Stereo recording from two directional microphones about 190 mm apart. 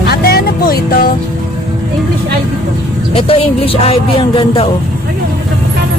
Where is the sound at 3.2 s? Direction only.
30° left (ahead or behind).